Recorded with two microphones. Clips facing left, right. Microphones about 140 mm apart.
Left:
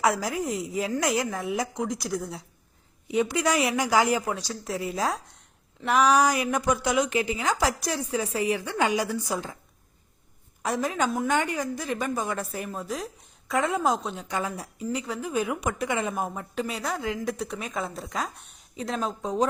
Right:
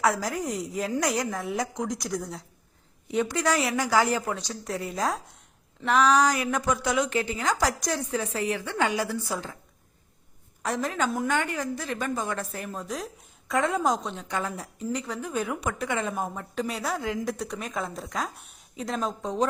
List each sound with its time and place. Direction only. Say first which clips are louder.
0.0 s a woman's voice: left 1 dB; 10° left (ahead or behind)
10.6 s a woman's voice: left 1 dB; 10° left (ahead or behind)